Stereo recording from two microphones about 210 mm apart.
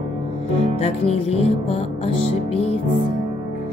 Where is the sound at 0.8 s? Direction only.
30° left (ahead or behind).